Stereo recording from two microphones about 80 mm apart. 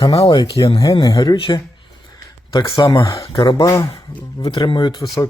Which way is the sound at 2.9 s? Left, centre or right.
Left.